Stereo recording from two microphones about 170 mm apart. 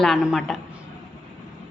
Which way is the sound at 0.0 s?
Centre (ahead or behind).